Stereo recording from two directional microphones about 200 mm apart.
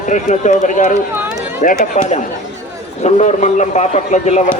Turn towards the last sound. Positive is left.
turn(degrees=35)  # may be behind; listen again after turning